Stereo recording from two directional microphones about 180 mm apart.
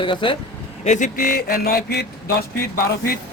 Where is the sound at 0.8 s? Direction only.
45° left (ahead or behind); by 2.4 s 60° left (ahead or behind).